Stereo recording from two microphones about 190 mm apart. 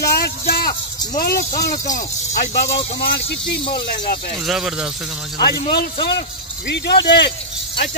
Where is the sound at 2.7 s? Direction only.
55° left (ahead or behind).